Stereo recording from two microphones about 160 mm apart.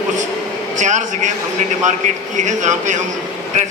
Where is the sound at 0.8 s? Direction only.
50° right (ahead or behind).